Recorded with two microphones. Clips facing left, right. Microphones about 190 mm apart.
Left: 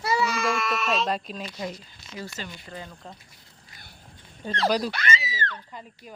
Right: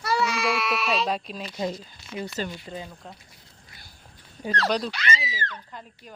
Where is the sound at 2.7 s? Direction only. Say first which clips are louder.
Right 3 dB; 20° right (ahead or behind).